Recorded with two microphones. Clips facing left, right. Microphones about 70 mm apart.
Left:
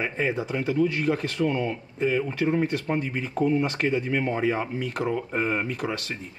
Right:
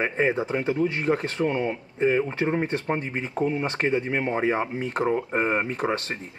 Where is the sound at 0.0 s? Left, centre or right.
Right.